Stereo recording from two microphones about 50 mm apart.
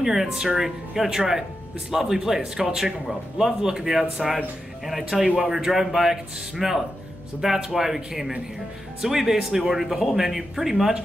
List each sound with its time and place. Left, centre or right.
0.0 s speech: centre